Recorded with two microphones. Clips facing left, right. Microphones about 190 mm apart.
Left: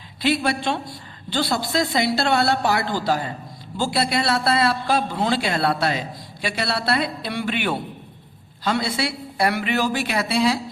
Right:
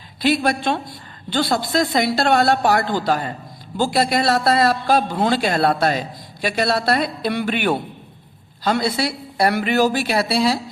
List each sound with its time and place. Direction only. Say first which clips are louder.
0.2 s a man's voice: right 3 dB; 45° right (ahead or behind)